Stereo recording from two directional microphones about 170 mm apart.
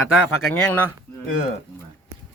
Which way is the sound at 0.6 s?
10° left (ahead or behind).